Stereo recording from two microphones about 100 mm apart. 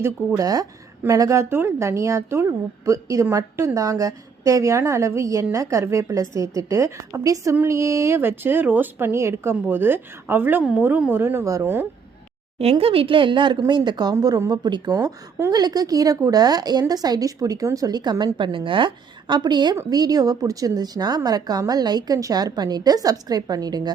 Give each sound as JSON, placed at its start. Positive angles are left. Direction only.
{"t": 0.3, "sound": "a woman's voice", "side_deg": -35}
{"t": 10.6, "sound": "a woman's voice", "side_deg": -10}
{"t": 12.8, "sound": "a woman's voice", "side_deg": -70}
{"t": 18.3, "sound": "a woman's voice", "side_deg": -55}